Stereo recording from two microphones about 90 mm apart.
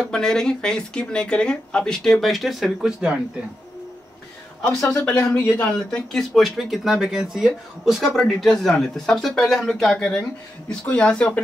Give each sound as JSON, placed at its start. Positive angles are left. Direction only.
{"t": 0.0, "sound": "speech", "side_deg": 5}
{"t": 4.6, "sound": "speech", "side_deg": 10}
{"t": 5.0, "sound": "speech", "side_deg": 20}
{"t": 5.7, "sound": "speech", "side_deg": 10}